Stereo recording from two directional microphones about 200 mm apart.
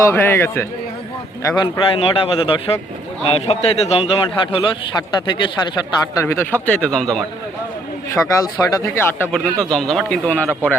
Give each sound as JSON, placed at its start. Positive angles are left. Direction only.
{"t": 0.0, "sound": "a man's voice", "side_deg": 10}
{"t": 8.1, "sound": "speech", "side_deg": 15}